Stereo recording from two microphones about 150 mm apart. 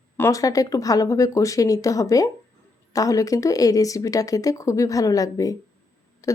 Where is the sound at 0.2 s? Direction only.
20° left (ahead or behind).